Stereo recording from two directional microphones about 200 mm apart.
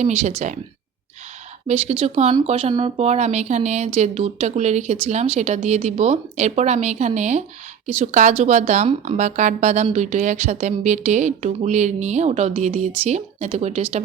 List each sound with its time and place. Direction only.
0.0 s speech: 35° right (ahead or behind)
1.6 s speech: 30° right (ahead or behind)